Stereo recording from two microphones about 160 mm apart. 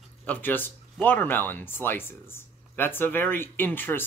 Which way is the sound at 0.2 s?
10° left (ahead or behind).